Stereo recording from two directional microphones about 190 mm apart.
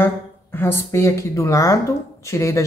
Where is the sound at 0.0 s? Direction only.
10° left (ahead or behind).